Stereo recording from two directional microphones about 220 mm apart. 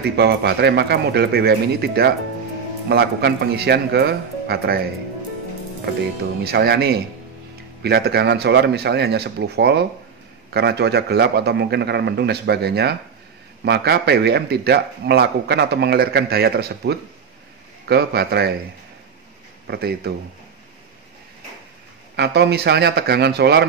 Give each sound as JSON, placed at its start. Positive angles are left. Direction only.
{"t": 0.0, "sound": "a man's voice", "side_deg": -50}
{"t": 6.4, "sound": "a man's voice", "side_deg": -45}
{"t": 19.7, "sound": "a man's voice", "side_deg": -45}
{"t": 22.1, "sound": "a man's voice", "side_deg": -50}